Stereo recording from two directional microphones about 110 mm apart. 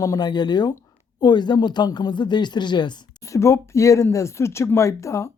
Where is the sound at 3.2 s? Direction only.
30° left (ahead or behind).